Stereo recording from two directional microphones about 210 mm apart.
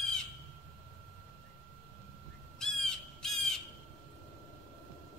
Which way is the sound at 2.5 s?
5° left (ahead or behind).